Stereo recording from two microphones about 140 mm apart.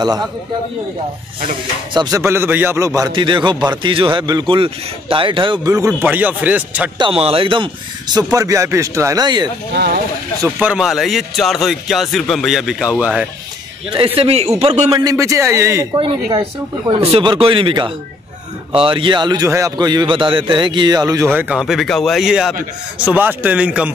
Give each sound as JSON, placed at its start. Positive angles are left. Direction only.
{"t": 2.0, "sound": "speech", "side_deg": -25}
{"t": 3.1, "sound": "speech", "side_deg": -35}
{"t": 7.0, "sound": "speech", "side_deg": -40}
{"t": 10.6, "sound": "a man's voice", "side_deg": -5}
{"t": 13.8, "sound": "a man's voice", "side_deg": -40}
{"t": 14.9, "sound": "speech", "side_deg": -30}
{"t": 15.1, "sound": "speech", "side_deg": -20}
{"t": 16.0, "sound": "speech", "side_deg": -35}
{"t": 21.4, "sound": "a man's voice", "side_deg": -5}